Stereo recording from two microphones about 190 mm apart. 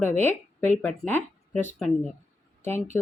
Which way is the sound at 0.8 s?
5° left (ahead or behind).